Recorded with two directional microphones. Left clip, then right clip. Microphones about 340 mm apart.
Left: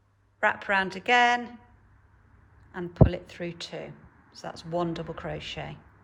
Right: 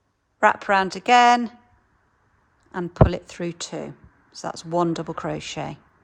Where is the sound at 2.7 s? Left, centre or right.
Centre.